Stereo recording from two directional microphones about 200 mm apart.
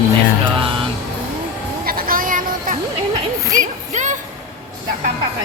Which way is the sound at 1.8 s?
50° right (ahead or behind).